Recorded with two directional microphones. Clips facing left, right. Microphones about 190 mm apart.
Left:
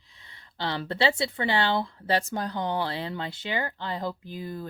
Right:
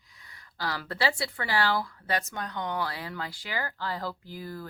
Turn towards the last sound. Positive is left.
turn(degrees=20)  # may be behind; listen again after turning